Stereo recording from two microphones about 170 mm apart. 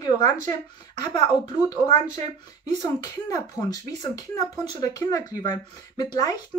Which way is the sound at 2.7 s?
20° left (ahead or behind).